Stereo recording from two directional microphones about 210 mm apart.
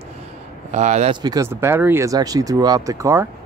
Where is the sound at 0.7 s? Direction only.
30° right (ahead or behind).